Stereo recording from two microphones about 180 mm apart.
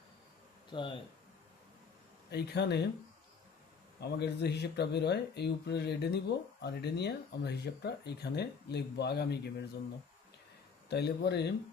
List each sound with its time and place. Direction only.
0.7 s speech: 25° left (ahead or behind)
2.3 s speech: 65° left (ahead or behind)
4.0 s speech: 70° left (ahead or behind)
10.8 s speech: 65° left (ahead or behind)